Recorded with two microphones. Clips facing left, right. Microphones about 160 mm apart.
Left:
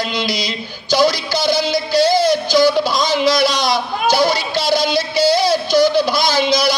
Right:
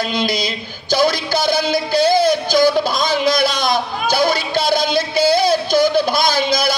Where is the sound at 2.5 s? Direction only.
50° right (ahead or behind).